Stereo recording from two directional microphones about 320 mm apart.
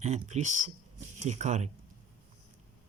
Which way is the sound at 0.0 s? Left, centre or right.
Right.